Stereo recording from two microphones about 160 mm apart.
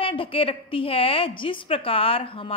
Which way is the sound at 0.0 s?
35° left (ahead or behind).